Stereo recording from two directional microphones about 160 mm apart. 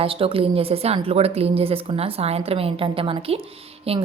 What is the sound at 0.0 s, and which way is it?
A woman's voice, 35° right (ahead or behind).